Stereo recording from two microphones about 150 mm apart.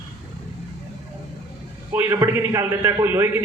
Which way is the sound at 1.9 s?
15° right (ahead or behind).